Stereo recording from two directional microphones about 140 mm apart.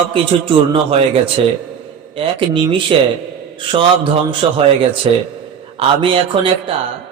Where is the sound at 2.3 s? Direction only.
35° right (ahead or behind).